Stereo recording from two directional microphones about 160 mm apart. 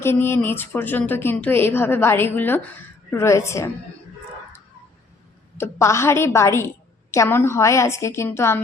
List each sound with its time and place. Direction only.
0.0 s speech: 15° left (ahead or behind)
5.5 s speech: 15° left (ahead or behind)